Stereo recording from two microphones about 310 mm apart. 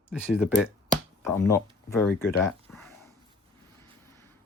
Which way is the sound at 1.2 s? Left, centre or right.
Centre.